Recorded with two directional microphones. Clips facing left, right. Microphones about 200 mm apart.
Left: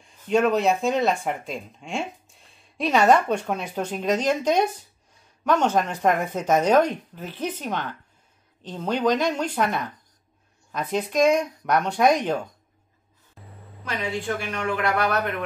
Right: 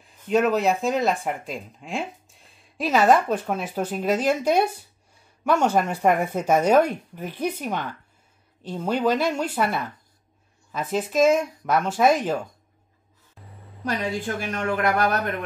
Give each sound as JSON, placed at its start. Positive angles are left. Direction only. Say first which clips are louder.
{"t": 0.0, "sound": "speech", "louder": "even", "side_deg": 0}
{"t": 13.4, "sound": "a sound", "louder": "left 1 dB", "side_deg": 0}
{"t": 13.8, "sound": "speech", "louder": "right 1 dB", "side_deg": -40}